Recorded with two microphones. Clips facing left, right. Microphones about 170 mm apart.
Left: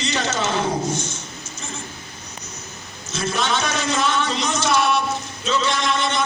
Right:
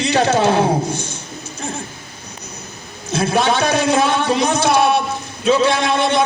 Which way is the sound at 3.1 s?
60° right (ahead or behind).